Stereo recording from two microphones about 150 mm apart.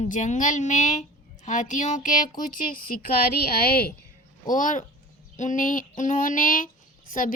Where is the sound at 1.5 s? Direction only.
55° left (ahead or behind).